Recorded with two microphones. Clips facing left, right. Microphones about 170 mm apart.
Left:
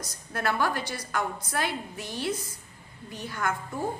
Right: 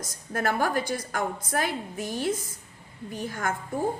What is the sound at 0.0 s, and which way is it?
A woman's voice, 45° right (ahead or behind).